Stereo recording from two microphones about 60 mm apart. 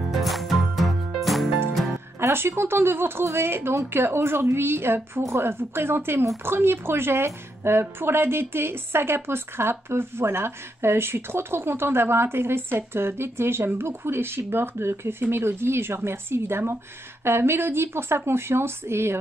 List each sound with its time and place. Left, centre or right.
0.1 s music: centre
2.1 s speech: right